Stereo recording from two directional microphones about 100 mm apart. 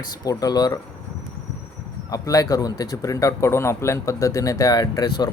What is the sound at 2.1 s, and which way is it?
Speech, 35° left (ahead or behind).